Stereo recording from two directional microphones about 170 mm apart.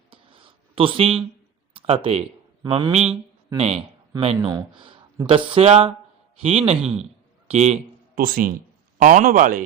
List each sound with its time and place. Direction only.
0.1 s a sound: 30° right (ahead or behind)
1.7 s speech: 35° right (ahead or behind)
4.4 s a man's voice: 20° right (ahead or behind); by 7.8 s 40° right (ahead or behind)
8.1 s speech: 55° right (ahead or behind)